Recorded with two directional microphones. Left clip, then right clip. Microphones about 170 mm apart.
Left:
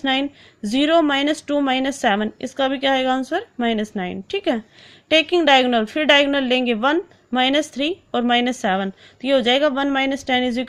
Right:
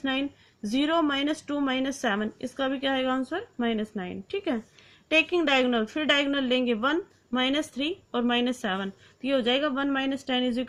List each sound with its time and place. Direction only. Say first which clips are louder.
0.0 s a woman's voice: left 8 dB; 40° left (ahead or behind)